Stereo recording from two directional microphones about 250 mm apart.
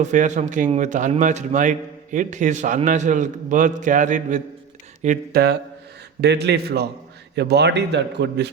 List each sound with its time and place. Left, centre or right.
0.0 s a man's voice: right